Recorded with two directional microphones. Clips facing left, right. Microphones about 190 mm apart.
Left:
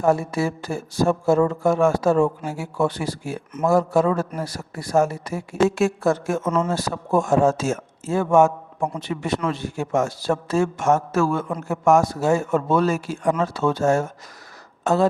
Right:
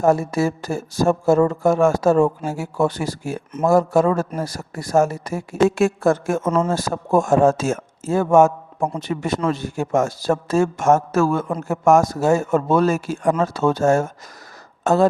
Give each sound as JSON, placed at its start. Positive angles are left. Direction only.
{"t": 0.0, "sound": "speech", "side_deg": -45}